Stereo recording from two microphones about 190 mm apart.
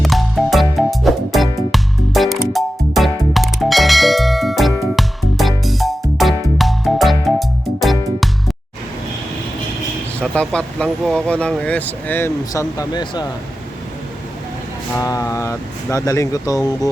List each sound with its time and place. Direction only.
0.0 s music: centre (ahead or behind)
10.2 s speech: 5° left (ahead or behind); by 13.2 s 20° left (ahead or behind)
14.9 s speech: 20° left (ahead or behind)